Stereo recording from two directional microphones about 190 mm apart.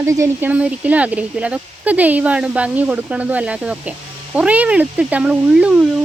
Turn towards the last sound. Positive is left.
turn(degrees=-5)  # may be behind; listen again after turning